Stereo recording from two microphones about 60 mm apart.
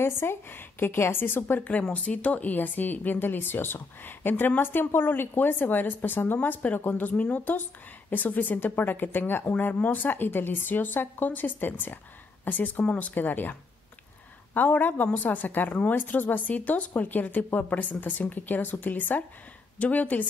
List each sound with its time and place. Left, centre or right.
0.0 s a woman's voice: left